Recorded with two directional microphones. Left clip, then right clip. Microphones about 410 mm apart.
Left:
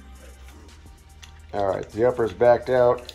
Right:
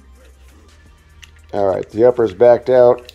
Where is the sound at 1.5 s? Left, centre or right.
Right.